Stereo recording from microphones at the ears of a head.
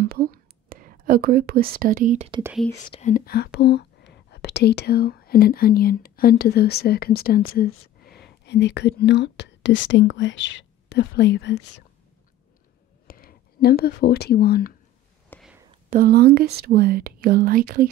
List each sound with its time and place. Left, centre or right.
0.0 s whispering: right
2.8 s speech: left
13.0 s speech: left
15.6 s speech: right